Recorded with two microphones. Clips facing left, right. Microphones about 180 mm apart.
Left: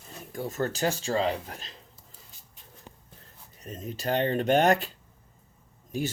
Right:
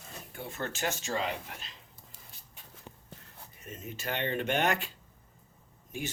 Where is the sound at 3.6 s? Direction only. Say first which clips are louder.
Left 6 dB; 35° left (ahead or behind).